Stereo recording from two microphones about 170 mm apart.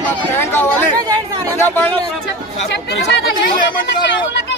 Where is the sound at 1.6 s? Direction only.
10° left (ahead or behind).